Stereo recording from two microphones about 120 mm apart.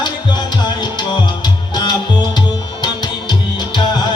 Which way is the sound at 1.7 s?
35° left (ahead or behind).